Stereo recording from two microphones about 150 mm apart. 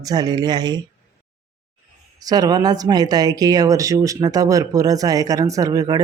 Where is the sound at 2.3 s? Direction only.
25° right (ahead or behind).